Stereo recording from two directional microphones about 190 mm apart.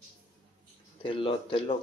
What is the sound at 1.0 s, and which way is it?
Speech, 25° left (ahead or behind).